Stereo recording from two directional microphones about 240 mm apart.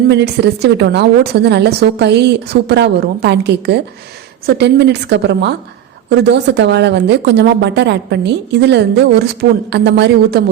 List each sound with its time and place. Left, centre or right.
0.1 s speech: right